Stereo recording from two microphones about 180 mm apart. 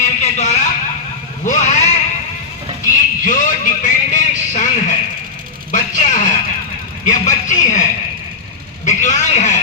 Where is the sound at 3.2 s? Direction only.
45° left (ahead or behind).